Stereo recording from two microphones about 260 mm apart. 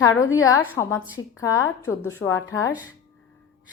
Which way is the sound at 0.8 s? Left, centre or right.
Centre.